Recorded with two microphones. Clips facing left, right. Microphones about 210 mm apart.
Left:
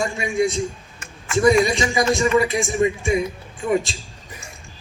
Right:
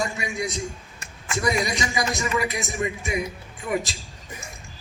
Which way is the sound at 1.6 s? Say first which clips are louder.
Left 7 dB; 25° left (ahead or behind).